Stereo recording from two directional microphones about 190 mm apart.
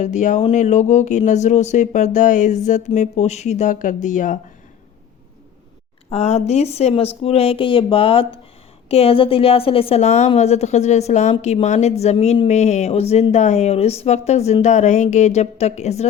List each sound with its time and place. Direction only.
0.0 s a woman's voice: 40° left (ahead or behind)
6.1 s a woman's voice: 35° left (ahead or behind)